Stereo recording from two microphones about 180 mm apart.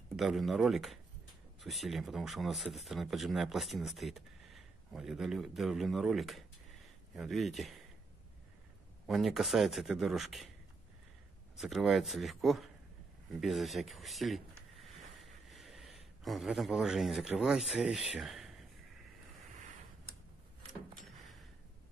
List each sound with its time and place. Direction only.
0.1 s speech: centre (ahead or behind)
9.0 s speech: centre (ahead or behind)
11.5 s speech: centre (ahead or behind)
14.8 s a sound: centre (ahead or behind)